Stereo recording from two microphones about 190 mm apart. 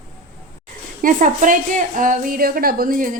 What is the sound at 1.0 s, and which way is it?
A woman's voice, 45° right (ahead or behind).